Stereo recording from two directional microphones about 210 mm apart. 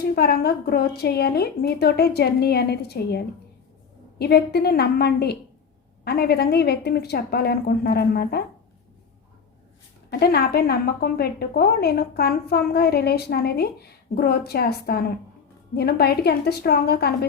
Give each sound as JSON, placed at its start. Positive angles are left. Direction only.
{"t": 0.0, "sound": "a woman's voice", "side_deg": 50}
{"t": 10.1, "sound": "a woman's voice", "side_deg": 50}